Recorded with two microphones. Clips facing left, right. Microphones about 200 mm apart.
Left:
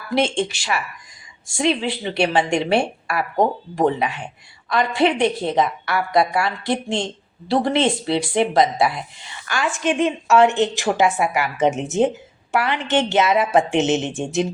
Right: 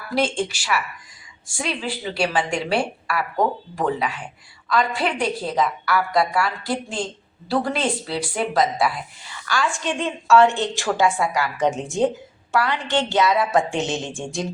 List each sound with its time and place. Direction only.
0.1 s a woman's voice: 25° left (ahead or behind)